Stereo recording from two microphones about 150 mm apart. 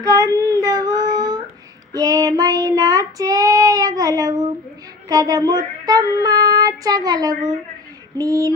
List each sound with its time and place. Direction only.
0.0 s child singing: 25° right (ahead or behind)